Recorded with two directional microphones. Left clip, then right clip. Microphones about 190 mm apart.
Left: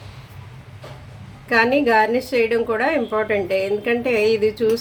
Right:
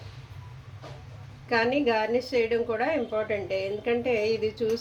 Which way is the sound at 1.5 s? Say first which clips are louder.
Left 8 dB; 20° left (ahead or behind).